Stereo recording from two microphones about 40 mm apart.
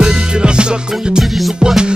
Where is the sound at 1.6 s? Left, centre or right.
Centre.